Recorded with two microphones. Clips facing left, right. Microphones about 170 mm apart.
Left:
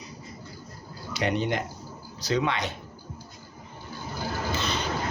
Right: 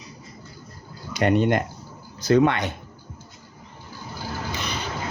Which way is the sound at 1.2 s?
50° right (ahead or behind).